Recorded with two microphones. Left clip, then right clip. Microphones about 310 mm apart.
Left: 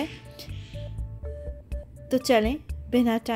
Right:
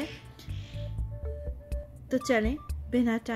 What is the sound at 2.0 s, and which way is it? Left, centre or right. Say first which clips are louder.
Speech: left 5 dB; centre.